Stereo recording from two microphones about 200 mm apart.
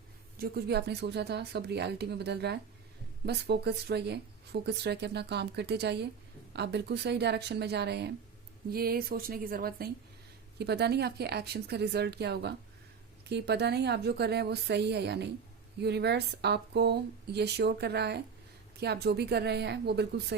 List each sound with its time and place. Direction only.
0.3 s speech: 50° right (ahead or behind)